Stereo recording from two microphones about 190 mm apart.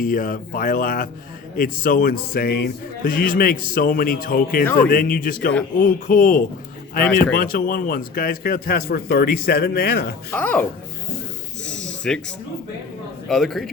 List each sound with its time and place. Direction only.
0.0 s a man's voice: 45° left (ahead or behind)
4.6 s speech: 10° left (ahead or behind)
4.9 s a man's voice: 50° left (ahead or behind)
10.3 s speech: 10° left (ahead or behind)
11.6 s wheeze: 5° left (ahead or behind)
13.2 s a man's voice: centre (ahead or behind)